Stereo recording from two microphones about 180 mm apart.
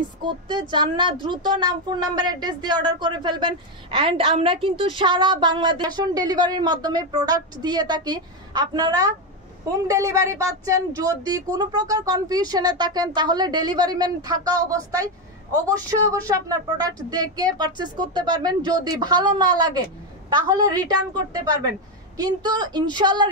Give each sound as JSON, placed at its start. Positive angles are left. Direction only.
{"t": 0.2, "sound": "speech", "side_deg": -25}